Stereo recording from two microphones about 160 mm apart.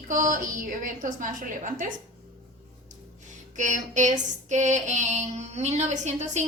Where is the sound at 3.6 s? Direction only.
50° right (ahead or behind).